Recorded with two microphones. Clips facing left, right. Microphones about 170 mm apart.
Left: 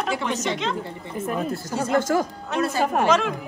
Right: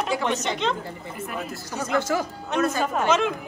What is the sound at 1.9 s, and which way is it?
Speech, 45° left (ahead or behind).